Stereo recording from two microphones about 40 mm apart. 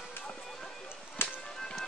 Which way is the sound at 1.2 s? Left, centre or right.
Left.